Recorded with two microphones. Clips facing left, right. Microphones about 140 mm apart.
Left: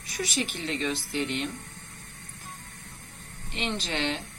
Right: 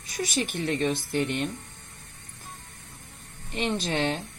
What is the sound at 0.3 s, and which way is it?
Speech, 45° right (ahead or behind).